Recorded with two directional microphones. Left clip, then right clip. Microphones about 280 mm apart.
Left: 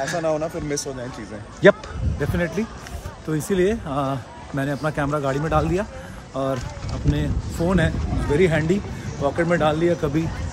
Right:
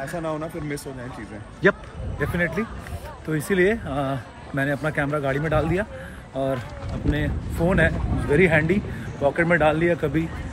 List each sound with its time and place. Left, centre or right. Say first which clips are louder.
0.0 s a man's voice: left 6 dB; left; by 10.2 s centre